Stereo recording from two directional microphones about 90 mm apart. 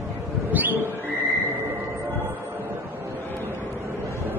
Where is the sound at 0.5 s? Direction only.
20° right (ahead or behind).